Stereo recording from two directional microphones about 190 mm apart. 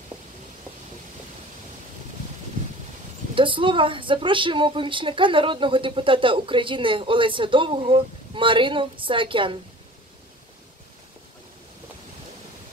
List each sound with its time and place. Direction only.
3.3 s a woman's voice: 25° right (ahead or behind)